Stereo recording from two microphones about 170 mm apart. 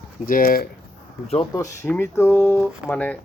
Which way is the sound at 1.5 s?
20° left (ahead or behind).